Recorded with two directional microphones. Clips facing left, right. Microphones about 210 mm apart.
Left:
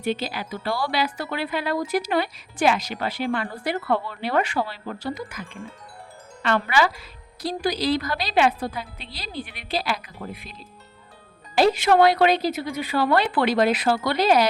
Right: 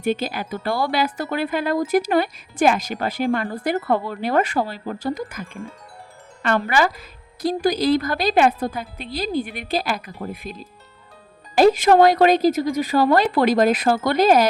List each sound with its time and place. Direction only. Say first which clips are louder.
0.0 s speech: right 4 dB; 50° right (ahead or behind)
6.4 s speech: right 2 dB; 45° right (ahead or behind)